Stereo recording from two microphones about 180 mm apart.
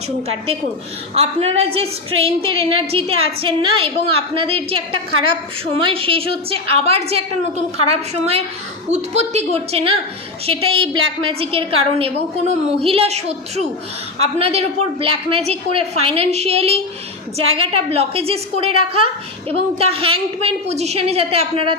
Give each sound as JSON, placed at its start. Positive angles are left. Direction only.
{"t": 1.1, "sound": "a woman's voice", "side_deg": -35}